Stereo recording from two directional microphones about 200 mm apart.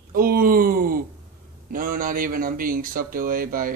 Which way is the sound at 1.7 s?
45° right (ahead or behind).